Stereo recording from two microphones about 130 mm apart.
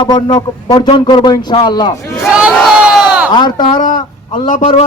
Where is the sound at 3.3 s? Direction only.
35° left (ahead or behind).